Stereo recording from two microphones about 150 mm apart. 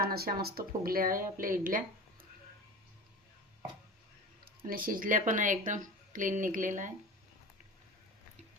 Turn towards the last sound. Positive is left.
turn(degrees=-60)  # may be behind; listen again after turning